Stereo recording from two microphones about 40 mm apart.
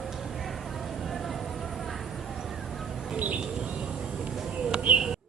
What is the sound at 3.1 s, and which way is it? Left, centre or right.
Bird, right.